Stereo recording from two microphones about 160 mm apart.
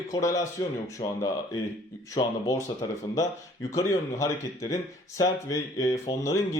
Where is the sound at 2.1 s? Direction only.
25° left (ahead or behind).